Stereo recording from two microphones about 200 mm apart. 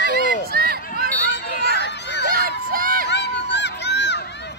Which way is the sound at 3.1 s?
60° left (ahead or behind).